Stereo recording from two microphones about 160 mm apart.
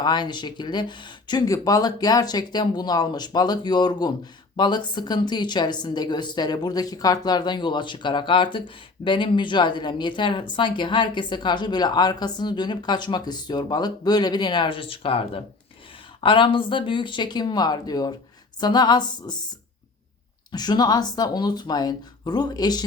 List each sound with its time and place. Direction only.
0.0 s a woman's voice: 25° left (ahead or behind)
20.5 s a woman's voice: 25° left (ahead or behind)